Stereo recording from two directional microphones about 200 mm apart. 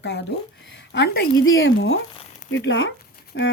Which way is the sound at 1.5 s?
70° left (ahead or behind).